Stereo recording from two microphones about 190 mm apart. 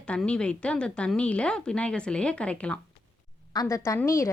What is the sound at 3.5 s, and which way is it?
Speech, 20° left (ahead or behind).